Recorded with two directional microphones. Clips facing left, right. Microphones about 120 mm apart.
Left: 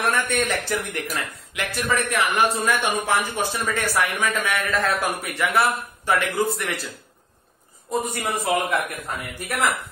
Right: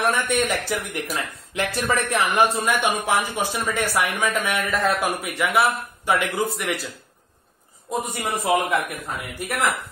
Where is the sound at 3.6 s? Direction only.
15° right (ahead or behind).